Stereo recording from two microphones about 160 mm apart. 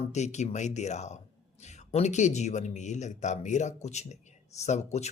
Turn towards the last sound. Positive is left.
turn(degrees=45)  # may be behind; listen again after turning